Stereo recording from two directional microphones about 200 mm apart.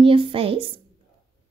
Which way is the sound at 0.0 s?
25° right (ahead or behind).